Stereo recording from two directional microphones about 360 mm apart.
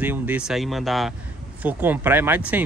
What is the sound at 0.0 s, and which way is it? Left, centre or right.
Speech, centre.